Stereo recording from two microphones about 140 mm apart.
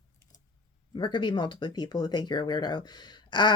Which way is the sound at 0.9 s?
35° left (ahead or behind).